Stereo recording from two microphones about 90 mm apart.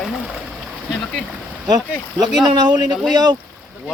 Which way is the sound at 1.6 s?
50° right (ahead or behind).